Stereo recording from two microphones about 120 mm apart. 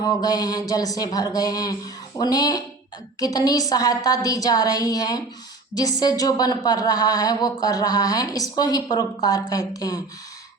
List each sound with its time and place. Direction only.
0.0 s a woman's voice: 30° left (ahead or behind)